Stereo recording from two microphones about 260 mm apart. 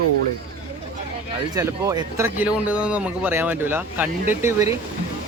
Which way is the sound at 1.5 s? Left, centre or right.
Centre.